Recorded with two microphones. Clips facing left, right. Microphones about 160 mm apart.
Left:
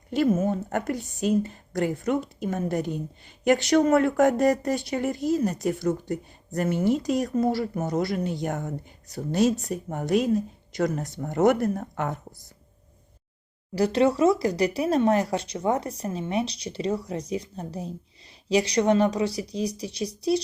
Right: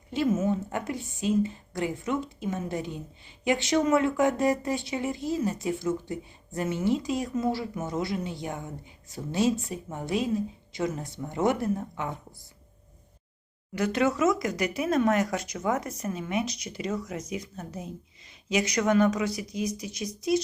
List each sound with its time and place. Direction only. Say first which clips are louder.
0.1 s speech: left 3 dB; 50° left (ahead or behind)
3.9 s speech: left 3 dB; 65° left (ahead or behind)
4.3 s speech: left 4 dB; 40° left (ahead or behind)
8.4 s speech: left 5 dB; 70° left (ahead or behind)
9.4 s speech: left 3 dB; 40° left (ahead or behind)
9.9 s speech: left 6 dB; 70° left (ahead or behind)
10.2 s speech: left 4 dB; 45° left (ahead or behind); by 12.1 s 65° left (ahead or behind)
13.7 s speech: left 4 dB; 35° left (ahead or behind)